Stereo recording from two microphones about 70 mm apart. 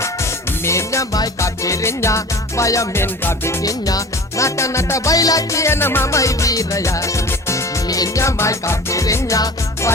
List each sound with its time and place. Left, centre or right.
0.0 s music: left
2.9 s music: left
3.6 s music: left
6.1 s music: left
7.9 s music: left
8.2 s music: left